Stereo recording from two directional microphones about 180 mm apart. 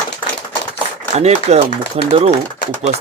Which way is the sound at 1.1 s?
35° right (ahead or behind).